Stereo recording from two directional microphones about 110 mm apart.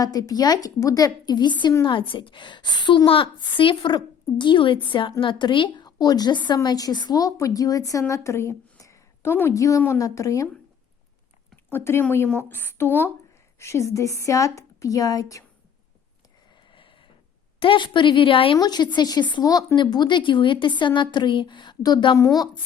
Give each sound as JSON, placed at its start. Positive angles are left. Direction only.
{"t": 0.0, "sound": "a woman's voice", "side_deg": 35}
{"t": 11.5, "sound": "a woman's voice", "side_deg": 20}
{"t": 16.7, "sound": "a sound", "side_deg": 50}
{"t": 17.6, "sound": "speech", "side_deg": 50}
{"t": 18.5, "sound": "speech", "side_deg": 40}